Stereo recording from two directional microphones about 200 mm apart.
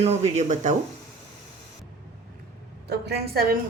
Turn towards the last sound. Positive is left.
turn(degrees=-50)  # may be behind; listen again after turning